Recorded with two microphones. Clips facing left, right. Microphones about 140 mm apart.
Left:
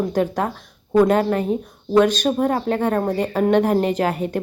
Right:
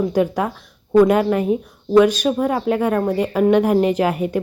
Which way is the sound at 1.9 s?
10° right (ahead or behind).